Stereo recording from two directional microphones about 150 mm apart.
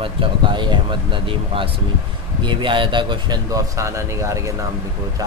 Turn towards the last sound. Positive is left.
turn(degrees=-20)  # may be behind; listen again after turning